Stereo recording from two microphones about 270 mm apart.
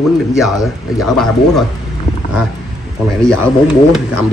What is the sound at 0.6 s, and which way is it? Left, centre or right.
A man's voice, centre.